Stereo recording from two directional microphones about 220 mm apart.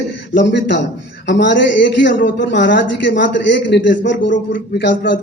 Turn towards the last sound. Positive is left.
turn(degrees=50)  # may be behind; listen again after turning